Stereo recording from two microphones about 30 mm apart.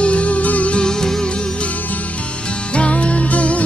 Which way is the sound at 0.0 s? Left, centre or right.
Left.